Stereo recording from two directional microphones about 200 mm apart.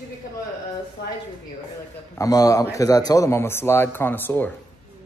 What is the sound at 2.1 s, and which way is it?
Speech, 15° left (ahead or behind).